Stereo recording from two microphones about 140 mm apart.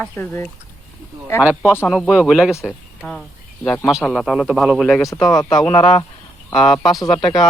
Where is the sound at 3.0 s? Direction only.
10° left (ahead or behind).